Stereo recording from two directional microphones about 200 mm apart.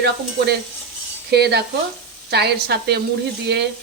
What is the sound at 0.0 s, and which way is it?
Speech, 55° right (ahead or behind).